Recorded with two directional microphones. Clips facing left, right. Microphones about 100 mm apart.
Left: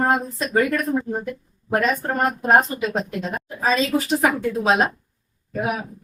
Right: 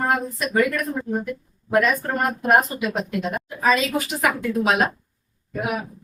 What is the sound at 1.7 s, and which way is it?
A woman's voice, 30° left (ahead or behind).